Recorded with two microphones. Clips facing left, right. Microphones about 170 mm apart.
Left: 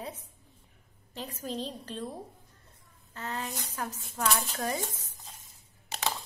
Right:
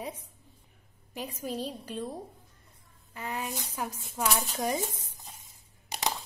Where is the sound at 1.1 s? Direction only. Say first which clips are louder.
Right 1 dB; 10° right (ahead or behind).